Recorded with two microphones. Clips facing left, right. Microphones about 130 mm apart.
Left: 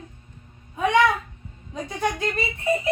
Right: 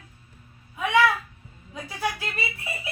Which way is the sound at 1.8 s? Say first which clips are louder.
Left 4 dB; 5° right (ahead or behind).